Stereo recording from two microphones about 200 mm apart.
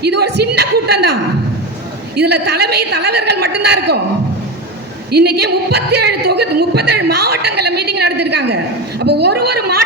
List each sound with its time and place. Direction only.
0.0 s a woman's voice: 55° right (ahead or behind)
5.1 s a woman's voice: 55° right (ahead or behind)